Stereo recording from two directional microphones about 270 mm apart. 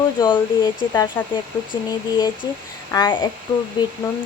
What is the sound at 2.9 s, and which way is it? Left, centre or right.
Speech, centre.